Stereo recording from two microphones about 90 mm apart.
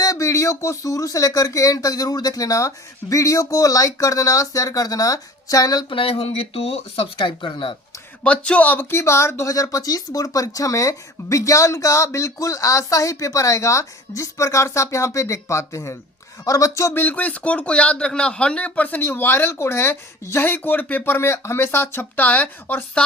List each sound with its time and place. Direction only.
0.0 s speech: 35° left (ahead or behind)
5.9 s speech: 85° left; by 7.8 s 70° left (ahead or behind)
8.2 s speech: 15° left (ahead or behind)